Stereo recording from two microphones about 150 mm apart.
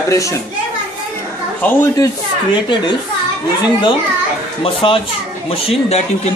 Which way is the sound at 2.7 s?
30° left (ahead or behind).